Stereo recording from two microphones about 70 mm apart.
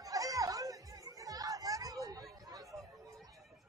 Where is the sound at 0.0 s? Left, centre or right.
Right.